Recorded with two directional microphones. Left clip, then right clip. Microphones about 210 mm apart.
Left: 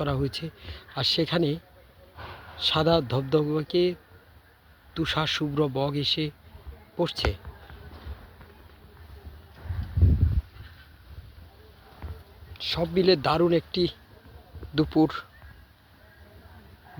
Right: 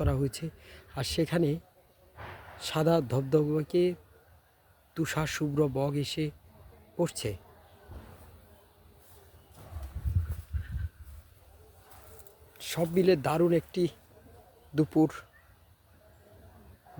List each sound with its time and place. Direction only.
0.0 s speech: 5° right (ahead or behind)
2.1 s a sound: 25° right (ahead or behind)
2.6 s speech: 10° right (ahead or behind)
4.9 s speech: 10° right (ahead or behind)
12.7 s speech: 10° right (ahead or behind)